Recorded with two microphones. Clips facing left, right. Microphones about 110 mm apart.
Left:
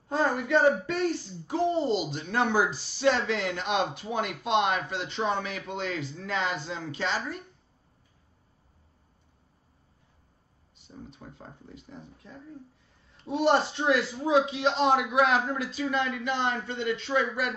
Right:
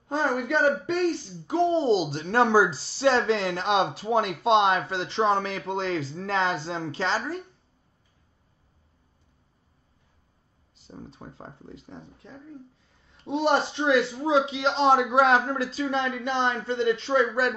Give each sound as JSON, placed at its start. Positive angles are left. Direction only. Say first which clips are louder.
{"t": 0.8, "sound": "a man's voice", "louder": "right 3 dB", "side_deg": -25}
{"t": 10.9, "sound": "a man's voice", "louder": "right 3 dB", "side_deg": -35}